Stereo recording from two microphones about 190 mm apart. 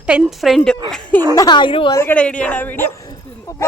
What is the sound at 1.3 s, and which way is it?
Speech, 20° left (ahead or behind).